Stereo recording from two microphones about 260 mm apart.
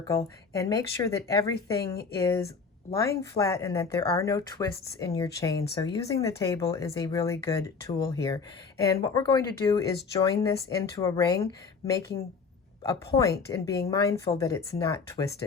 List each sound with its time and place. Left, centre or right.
0.0 s speech: centre
13.1 s speech: left
13.5 s speech: centre